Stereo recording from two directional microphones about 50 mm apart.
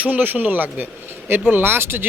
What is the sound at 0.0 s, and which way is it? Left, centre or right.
Speech, right.